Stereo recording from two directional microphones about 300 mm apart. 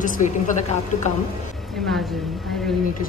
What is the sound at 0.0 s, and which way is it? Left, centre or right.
Speech, left.